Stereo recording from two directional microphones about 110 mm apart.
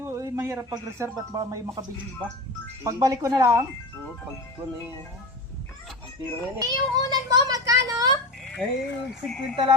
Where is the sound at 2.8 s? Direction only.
30° right (ahead or behind).